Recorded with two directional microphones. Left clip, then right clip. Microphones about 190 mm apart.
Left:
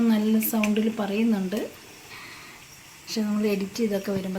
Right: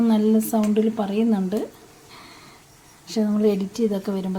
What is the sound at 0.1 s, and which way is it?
Speech, 60° right (ahead or behind).